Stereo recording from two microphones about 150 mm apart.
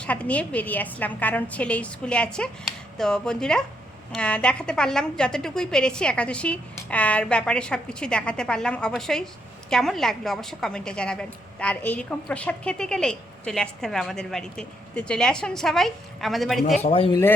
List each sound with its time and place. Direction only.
0.0 s a woman's voice: 10° left (ahead or behind)
16.7 s speech: 45° left (ahead or behind)